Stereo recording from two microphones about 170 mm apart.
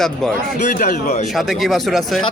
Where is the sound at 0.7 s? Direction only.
50° left (ahead or behind).